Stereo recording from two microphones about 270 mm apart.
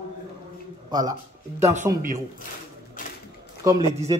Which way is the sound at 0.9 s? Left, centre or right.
Centre.